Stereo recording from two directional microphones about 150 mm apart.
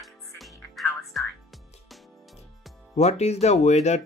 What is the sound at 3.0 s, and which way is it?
Speech, 45° left (ahead or behind).